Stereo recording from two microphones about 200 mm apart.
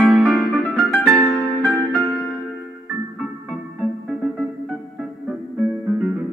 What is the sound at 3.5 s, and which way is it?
Music, centre (ahead or behind).